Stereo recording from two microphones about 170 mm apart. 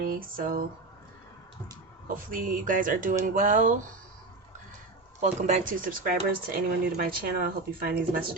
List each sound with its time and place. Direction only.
0.0 s speech: 60° right (ahead or behind)
2.0 s speech: 55° right (ahead or behind)
5.2 s speech: 45° right (ahead or behind); by 7.9 s 60° right (ahead or behind)